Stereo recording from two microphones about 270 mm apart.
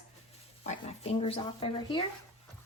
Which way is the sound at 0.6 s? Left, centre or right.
Left.